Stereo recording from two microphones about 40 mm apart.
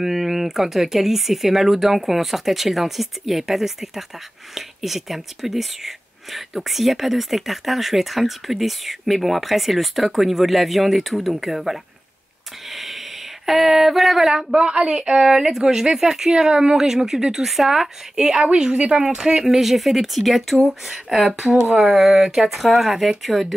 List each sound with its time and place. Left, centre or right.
0.0 s speech: centre
12.6 s a sound: centre
13.5 s speech: centre
14.5 s a woman's voice: right
15.1 s speech: centre